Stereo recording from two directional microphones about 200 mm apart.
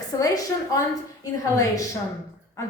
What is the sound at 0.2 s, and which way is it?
A woman's voice, 15° left (ahead or behind).